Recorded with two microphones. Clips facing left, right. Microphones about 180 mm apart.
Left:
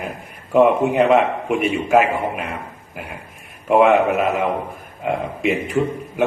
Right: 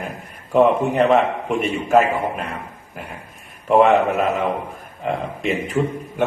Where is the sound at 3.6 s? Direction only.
10° left (ahead or behind).